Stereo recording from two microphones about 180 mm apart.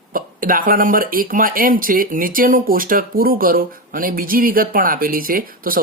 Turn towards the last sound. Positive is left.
turn(degrees=-50)  # may be behind; listen again after turning